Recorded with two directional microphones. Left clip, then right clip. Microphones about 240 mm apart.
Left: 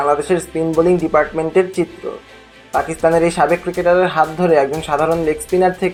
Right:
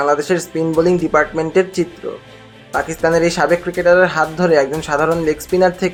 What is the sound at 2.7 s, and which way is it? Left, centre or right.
Speech, centre.